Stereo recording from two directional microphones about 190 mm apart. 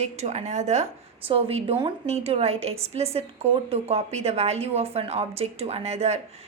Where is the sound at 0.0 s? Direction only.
35° right (ahead or behind).